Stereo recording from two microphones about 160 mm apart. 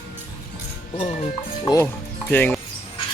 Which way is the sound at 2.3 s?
10° left (ahead or behind).